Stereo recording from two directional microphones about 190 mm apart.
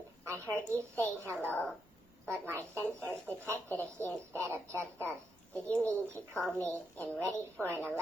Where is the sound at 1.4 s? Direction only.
10° left (ahead or behind).